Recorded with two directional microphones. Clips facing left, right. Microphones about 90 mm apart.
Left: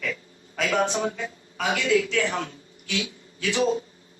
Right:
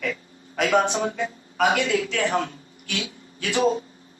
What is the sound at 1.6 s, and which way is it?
Speech, 50° right (ahead or behind).